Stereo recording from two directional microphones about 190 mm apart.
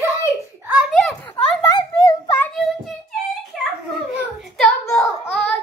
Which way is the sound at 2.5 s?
Centre (ahead or behind).